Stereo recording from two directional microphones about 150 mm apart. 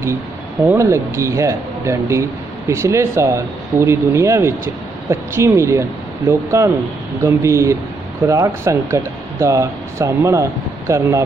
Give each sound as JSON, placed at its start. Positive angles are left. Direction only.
{"t": 0.7, "sound": "speech", "side_deg": -20}